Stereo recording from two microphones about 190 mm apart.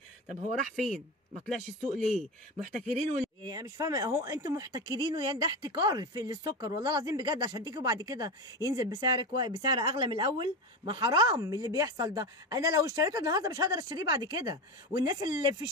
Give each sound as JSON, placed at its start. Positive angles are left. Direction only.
{"t": 0.7, "sound": "speech", "side_deg": 5}
{"t": 3.0, "sound": "speech", "side_deg": -20}